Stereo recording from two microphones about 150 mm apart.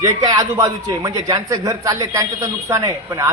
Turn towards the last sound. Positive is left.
turn(degrees=-20)  # may be behind; listen again after turning